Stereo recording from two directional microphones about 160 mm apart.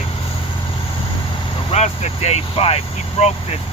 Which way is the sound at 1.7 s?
45° left (ahead or behind).